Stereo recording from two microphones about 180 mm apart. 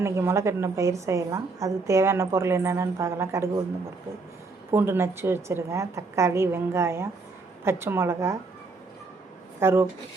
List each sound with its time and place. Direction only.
0.0 s a woman's voice: 15° right (ahead or behind)
4.7 s a woman's voice: 15° right (ahead or behind)
9.6 s speech: 15° right (ahead or behind)